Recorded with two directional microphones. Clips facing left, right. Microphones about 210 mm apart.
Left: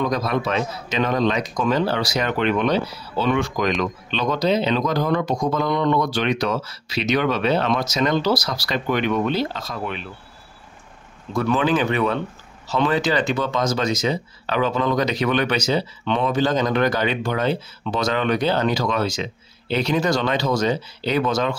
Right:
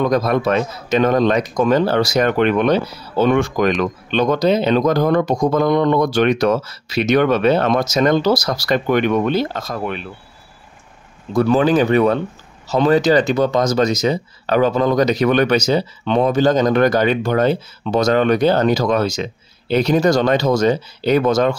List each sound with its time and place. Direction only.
0.0 s a man's voice: 50° right (ahead or behind)
11.3 s a man's voice: 35° right (ahead or behind)